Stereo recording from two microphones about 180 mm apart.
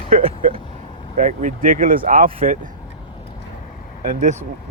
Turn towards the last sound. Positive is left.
turn(degrees=-50)  # may be behind; listen again after turning